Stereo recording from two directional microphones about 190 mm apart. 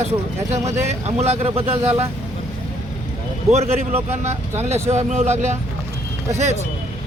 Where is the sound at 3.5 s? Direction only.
35° right (ahead or behind).